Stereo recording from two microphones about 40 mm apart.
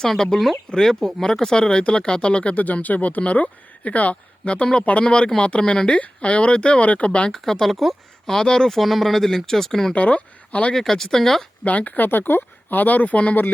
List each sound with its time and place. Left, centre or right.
0.0 s speech: centre; by 7.3 s left
7.3 s speech: centre
7.7 s speech: centre
8.3 s speech: centre
8.7 s speech: centre
9.9 s speech: left
10.8 s speech: centre
11.6 s speech: left
12.0 s speech: left